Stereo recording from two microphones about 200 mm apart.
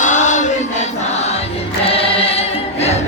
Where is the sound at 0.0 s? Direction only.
40° left (ahead or behind).